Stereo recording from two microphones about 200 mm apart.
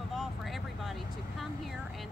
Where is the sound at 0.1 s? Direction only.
Centre (ahead or behind).